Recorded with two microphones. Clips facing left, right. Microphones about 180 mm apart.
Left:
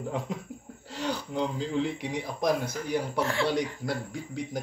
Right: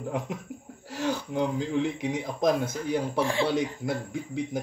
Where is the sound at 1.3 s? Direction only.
15° right (ahead or behind).